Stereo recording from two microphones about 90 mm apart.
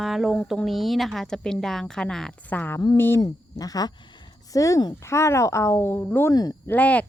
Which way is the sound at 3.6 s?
45° left (ahead or behind).